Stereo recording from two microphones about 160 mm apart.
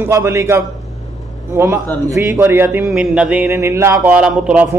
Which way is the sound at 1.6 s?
15° right (ahead or behind).